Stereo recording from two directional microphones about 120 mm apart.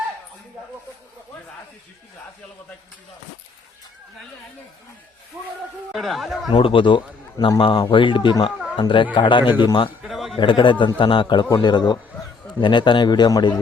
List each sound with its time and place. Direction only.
5.9 s speech: centre (ahead or behind)
6.5 s a man's voice: 45° left (ahead or behind)
10.0 s a sound: centre (ahead or behind)
10.3 s a man's voice: 45° left (ahead or behind)